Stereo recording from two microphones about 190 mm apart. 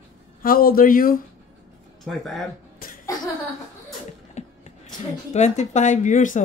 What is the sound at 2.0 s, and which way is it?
Speech, centre (ahead or behind).